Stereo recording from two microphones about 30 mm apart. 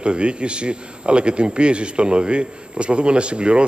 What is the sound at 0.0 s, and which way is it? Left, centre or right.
A man's voice, right.